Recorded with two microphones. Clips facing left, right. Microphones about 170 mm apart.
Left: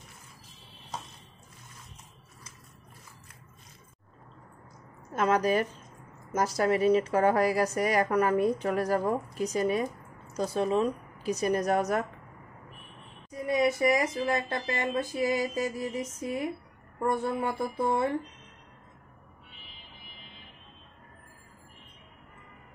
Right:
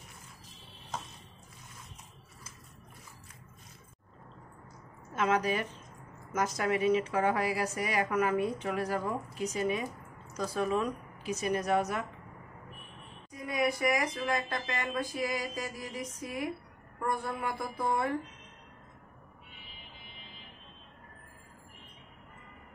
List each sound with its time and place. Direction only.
5.1 s speech: 40° left (ahead or behind)
10.3 s speech: 25° left (ahead or behind); by 12.1 s 45° left (ahead or behind)
13.3 s speech: 25° left (ahead or behind)